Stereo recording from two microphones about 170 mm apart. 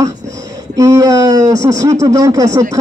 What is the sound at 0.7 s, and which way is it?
Speech, 20° right (ahead or behind).